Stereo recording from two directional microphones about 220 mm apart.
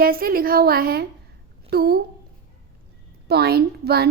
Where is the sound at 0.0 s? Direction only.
40° right (ahead or behind).